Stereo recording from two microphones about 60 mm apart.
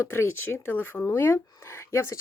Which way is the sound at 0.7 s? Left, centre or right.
Left.